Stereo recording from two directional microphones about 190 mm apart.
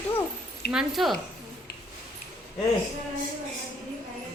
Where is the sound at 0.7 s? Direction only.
Centre (ahead or behind).